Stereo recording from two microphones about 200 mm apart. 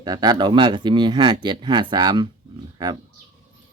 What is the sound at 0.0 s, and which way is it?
Speech, 20° right (ahead or behind).